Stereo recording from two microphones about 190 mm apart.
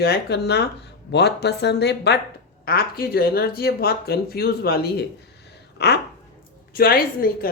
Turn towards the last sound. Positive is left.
turn(degrees=50)  # may be behind; listen again after turning